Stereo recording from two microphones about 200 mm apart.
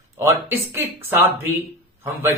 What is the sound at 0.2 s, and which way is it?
Speech, 15° right (ahead or behind).